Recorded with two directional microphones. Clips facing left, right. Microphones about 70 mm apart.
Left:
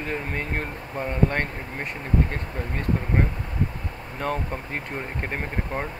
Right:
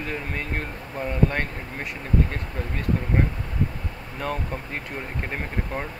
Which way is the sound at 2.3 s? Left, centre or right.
Centre.